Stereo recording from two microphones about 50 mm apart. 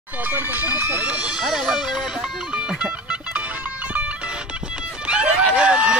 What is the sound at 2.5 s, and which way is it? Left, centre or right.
Music, right.